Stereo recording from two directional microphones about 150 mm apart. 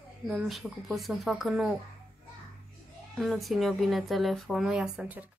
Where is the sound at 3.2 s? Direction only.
Centre (ahead or behind).